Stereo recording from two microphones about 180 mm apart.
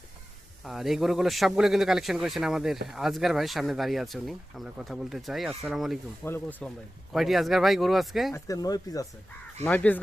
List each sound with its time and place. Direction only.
0.6 s speech: centre (ahead or behind)
6.2 s speech: 10° left (ahead or behind)
7.1 s speech: centre (ahead or behind)
8.3 s speech: 20° left (ahead or behind)
9.6 s speech: 10° left (ahead or behind)